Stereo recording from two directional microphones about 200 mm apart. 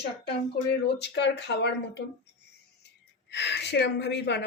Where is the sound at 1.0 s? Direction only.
60° left (ahead or behind).